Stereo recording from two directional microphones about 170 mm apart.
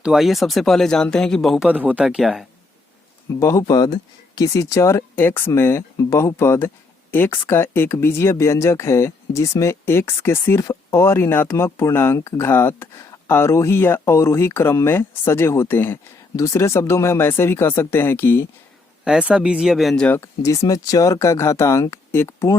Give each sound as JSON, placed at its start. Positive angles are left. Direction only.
{"t": 0.0, "sound": "speech", "side_deg": 0}
{"t": 3.4, "sound": "speech", "side_deg": 20}
{"t": 19.0, "sound": "speech", "side_deg": -5}